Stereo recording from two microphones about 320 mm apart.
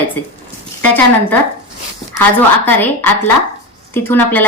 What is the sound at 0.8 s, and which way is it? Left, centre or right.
Speech, centre.